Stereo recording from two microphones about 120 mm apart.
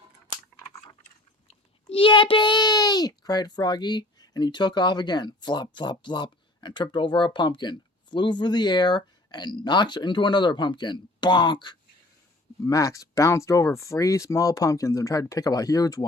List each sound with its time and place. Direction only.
1.9 s a child's voice: 45° left (ahead or behind)
12.6 s speech: 25° left (ahead or behind)